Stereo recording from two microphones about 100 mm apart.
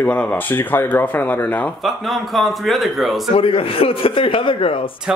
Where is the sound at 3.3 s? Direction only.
65° left (ahead or behind).